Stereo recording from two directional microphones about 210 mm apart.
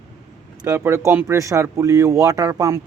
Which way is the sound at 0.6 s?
10° right (ahead or behind).